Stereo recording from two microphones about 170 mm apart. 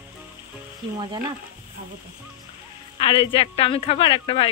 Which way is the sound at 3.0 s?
35° left (ahead or behind).